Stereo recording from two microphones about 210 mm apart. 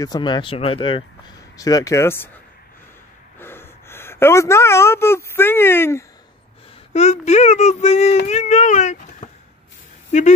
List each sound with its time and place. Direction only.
0.0 s speech: 20° left (ahead or behind)
3.3 s a woman's voice: 10° left (ahead or behind)
6.9 s speech: 35° left (ahead or behind)